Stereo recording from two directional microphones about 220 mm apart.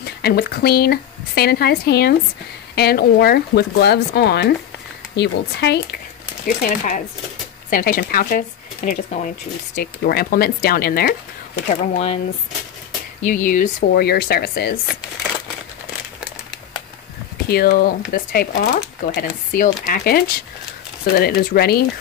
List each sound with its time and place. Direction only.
0.0 s speech: 45° left (ahead or behind)
6.4 s speech: 40° left (ahead or behind)
11.6 s speech: 30° left (ahead or behind)
13.3 s speech: 40° left (ahead or behind)
17.5 s speech: 45° left (ahead or behind)